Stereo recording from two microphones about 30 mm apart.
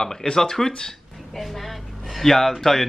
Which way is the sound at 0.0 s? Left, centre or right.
Centre.